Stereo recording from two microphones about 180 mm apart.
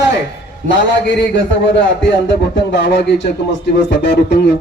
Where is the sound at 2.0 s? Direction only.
80° left.